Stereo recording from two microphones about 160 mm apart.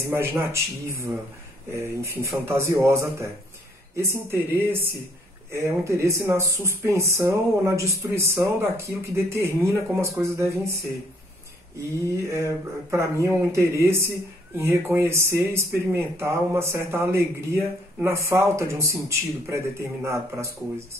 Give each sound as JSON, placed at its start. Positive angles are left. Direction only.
{"t": 0.1, "sound": "speech", "side_deg": -15}
{"t": 5.5, "sound": "speech", "side_deg": -15}
{"t": 12.2, "sound": "speech", "side_deg": -20}